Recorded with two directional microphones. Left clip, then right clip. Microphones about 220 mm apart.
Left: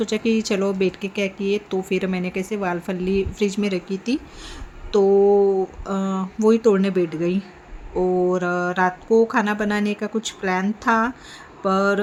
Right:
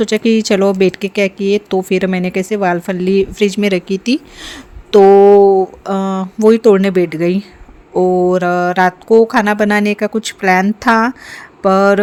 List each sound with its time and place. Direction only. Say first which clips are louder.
0.0 s speech: right 9 dB; 35° right (ahead or behind)